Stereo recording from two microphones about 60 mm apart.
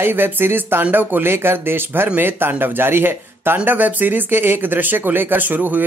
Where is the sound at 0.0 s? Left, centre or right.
Right.